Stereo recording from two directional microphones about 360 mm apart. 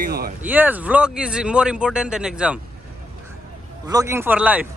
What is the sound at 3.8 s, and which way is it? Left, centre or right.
Speech, centre.